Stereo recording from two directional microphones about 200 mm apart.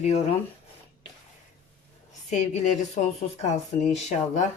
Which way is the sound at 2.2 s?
35° left (ahead or behind).